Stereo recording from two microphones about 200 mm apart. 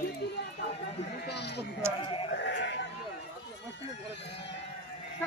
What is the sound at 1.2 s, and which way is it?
Bleat, 55° left (ahead or behind).